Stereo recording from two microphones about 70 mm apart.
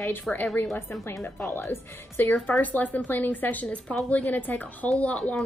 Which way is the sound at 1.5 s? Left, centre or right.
Left.